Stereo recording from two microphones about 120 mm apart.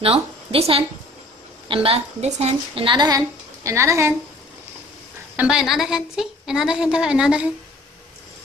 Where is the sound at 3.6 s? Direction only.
25° right (ahead or behind).